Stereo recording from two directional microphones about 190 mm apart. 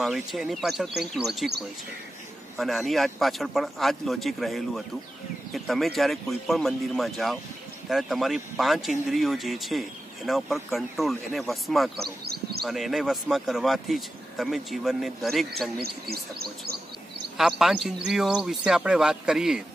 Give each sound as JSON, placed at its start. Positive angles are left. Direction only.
{"t": 0.0, "sound": "speech", "side_deg": 0}
{"t": 2.6, "sound": "speech", "side_deg": 0}
{"t": 15.8, "sound": "speech", "side_deg": -55}
{"t": 17.4, "sound": "speech", "side_deg": 0}